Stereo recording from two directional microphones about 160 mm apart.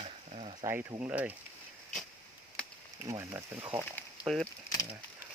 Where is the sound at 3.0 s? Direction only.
20° right (ahead or behind).